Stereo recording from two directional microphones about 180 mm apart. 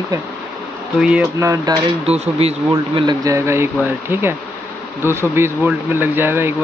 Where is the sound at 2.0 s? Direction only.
35° right (ahead or behind).